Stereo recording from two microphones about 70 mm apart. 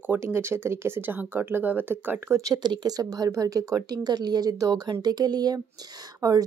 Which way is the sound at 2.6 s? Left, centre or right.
Right.